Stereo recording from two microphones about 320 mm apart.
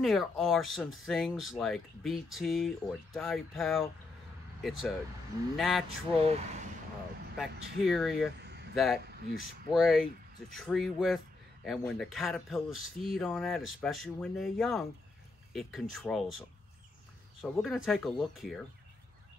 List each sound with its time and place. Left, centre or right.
0.0 s speech: centre
6.2 s speech: centre
7.3 s speech: centre
8.4 s a sound: right
8.7 s speech: centre
17.4 s speech: centre